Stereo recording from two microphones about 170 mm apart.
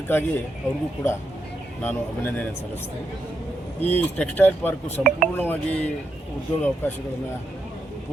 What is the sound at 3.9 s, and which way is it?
Speech, 10° left (ahead or behind).